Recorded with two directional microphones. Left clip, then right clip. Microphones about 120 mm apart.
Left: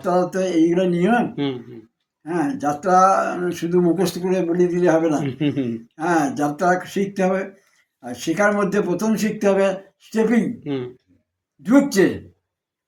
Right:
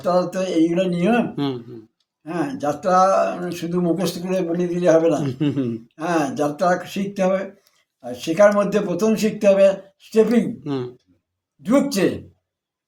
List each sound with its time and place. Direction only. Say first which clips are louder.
0.0 s speech: even; 10° right (ahead or behind)
2.2 s speech: left 1 dB; 15° right (ahead or behind)
5.2 s speech: even; 40° right (ahead or behind)
6.0 s speech: left 1 dB; 15° right (ahead or behind)
10.6 s speech: even; 40° right (ahead or behind)
11.6 s speech: left 3 dB; 15° right (ahead or behind)